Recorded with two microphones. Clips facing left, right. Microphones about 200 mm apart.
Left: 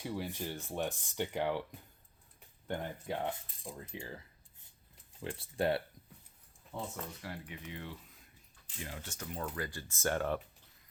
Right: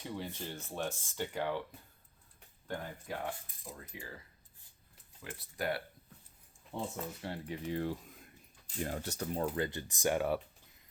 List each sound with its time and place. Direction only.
0.0 s speech: 10° left (ahead or behind)
2.6 s coin: 25° left (ahead or behind)
5.2 s coin: 25° left (ahead or behind)
6.9 s speech: 25° right (ahead or behind); by 10.4 s 10° right (ahead or behind)